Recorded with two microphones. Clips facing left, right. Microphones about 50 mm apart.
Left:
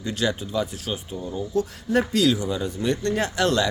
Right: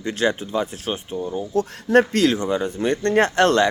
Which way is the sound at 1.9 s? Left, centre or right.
Right.